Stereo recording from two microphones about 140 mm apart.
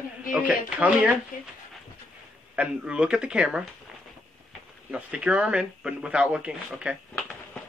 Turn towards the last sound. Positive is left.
turn(degrees=0)  # may be behind; listen again after turning